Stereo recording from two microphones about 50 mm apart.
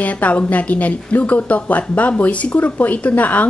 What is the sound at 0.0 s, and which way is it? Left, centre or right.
A woman's voice, left.